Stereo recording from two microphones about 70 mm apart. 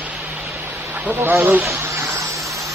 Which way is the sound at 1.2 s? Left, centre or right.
Right.